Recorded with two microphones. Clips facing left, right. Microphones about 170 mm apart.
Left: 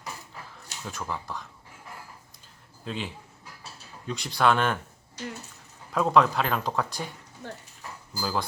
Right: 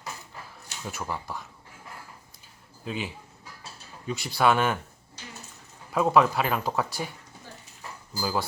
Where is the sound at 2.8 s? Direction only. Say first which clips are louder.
Right 1 dB; 5° right (ahead or behind).